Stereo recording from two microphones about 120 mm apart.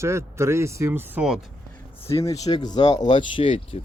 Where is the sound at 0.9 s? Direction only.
15° right (ahead or behind).